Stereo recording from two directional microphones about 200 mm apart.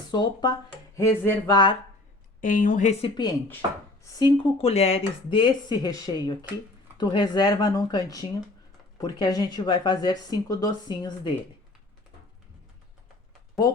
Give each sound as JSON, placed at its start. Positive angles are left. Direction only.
{"t": 0.1, "sound": "a woman's voice", "side_deg": 20}
{"t": 2.4, "sound": "speech", "side_deg": 40}
{"t": 4.1, "sound": "a woman's voice", "side_deg": 25}